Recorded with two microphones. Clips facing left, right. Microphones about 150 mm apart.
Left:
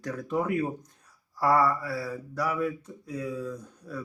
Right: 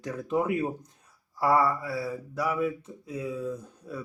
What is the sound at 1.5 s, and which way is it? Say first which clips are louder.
Speech: even; 25° right (ahead or behind).